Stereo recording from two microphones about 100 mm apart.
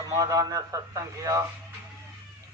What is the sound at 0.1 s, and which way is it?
A man's voice, 35° right (ahead or behind).